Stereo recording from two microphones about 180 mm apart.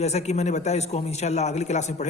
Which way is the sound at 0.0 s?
40° left (ahead or behind).